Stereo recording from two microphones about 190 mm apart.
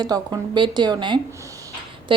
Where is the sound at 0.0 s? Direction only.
20° right (ahead or behind).